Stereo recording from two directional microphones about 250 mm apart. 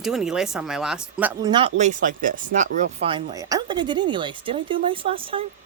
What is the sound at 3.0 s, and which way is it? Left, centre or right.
Speech, centre.